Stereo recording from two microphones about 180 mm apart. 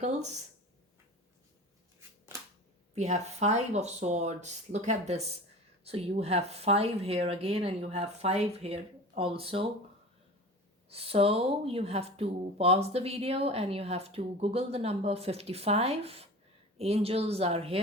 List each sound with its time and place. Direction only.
0.0 s speech: 40° right (ahead or behind)
2.9 s speech: 40° right (ahead or behind)
10.8 s speech: 35° right (ahead or behind)